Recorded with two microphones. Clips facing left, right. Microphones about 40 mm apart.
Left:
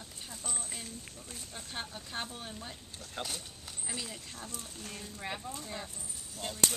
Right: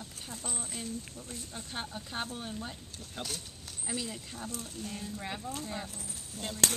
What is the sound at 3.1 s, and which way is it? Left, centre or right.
Speech, centre.